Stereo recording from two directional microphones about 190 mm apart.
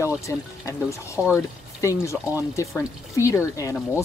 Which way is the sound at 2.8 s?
15° left (ahead or behind).